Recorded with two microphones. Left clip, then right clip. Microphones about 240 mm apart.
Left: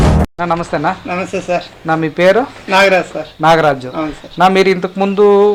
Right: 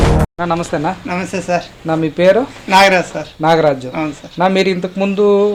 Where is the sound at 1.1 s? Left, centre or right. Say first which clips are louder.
Left 1 dB; right.